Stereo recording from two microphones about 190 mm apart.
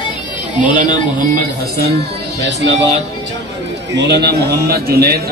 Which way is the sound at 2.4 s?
65° right (ahead or behind).